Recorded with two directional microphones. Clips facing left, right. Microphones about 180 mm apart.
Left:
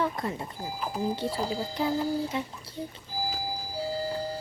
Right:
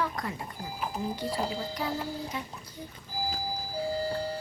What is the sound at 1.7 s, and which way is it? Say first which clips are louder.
Speech: left 6 dB; 25° left (ahead or behind).